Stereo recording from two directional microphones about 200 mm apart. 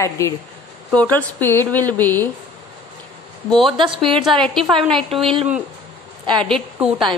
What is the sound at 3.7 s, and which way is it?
Speech, 25° right (ahead or behind).